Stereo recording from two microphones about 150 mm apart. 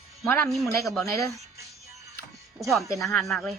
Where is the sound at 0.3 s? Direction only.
15° left (ahead or behind).